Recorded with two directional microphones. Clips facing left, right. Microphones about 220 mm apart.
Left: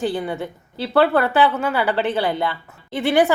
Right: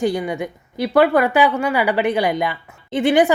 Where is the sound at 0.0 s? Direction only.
15° right (ahead or behind).